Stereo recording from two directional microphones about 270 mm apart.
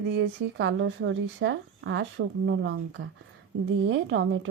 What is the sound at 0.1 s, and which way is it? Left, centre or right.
A woman's voice, right.